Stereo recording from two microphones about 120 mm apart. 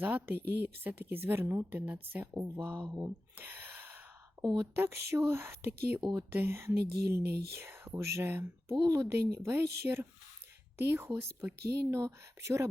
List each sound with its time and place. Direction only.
0.0 s a woman's voice: 15° right (ahead or behind)
2.9 s a sound: 15° right (ahead or behind)
4.7 s speech: 20° right (ahead or behind)